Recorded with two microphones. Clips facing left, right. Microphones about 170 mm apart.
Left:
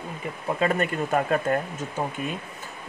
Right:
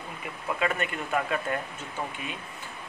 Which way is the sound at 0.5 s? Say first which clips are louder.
Left 5 dB; 35° left (ahead or behind).